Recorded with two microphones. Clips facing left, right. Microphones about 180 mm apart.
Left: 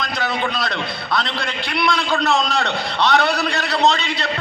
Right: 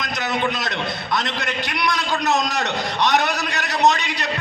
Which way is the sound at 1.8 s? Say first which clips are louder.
Left 4 dB; 20° right (ahead or behind).